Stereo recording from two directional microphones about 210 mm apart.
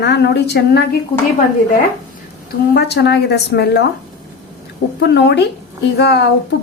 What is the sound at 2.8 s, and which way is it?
A woman's voice, 55° left (ahead or behind).